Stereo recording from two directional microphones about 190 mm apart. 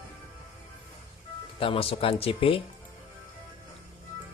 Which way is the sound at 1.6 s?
30° left (ahead or behind).